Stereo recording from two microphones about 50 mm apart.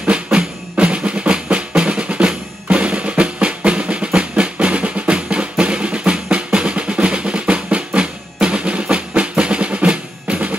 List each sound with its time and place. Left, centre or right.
0.3 s drum: centre